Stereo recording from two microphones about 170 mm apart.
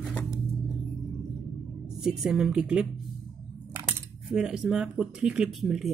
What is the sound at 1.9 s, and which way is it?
Speech, 5° right (ahead or behind).